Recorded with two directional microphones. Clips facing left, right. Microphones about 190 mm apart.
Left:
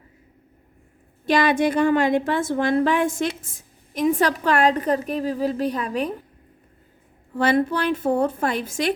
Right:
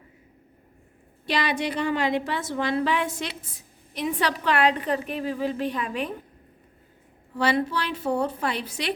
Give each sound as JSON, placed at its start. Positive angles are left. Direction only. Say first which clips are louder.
{"t": 1.2, "sound": "a woman's voice", "louder": "left 7 dB", "side_deg": 45}
{"t": 7.3, "sound": "a woman's voice", "louder": "left 4 dB", "side_deg": 50}